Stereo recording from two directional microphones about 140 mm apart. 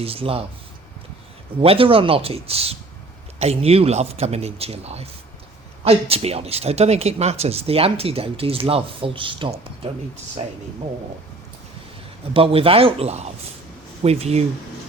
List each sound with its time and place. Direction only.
0.0 s speech: 40° right (ahead or behind)
1.6 s speech: 40° right (ahead or behind)
12.3 s speech: 40° right (ahead or behind)